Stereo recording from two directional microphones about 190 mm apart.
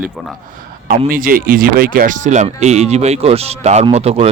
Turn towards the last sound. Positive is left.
turn(degrees=-35)  # may be behind; listen again after turning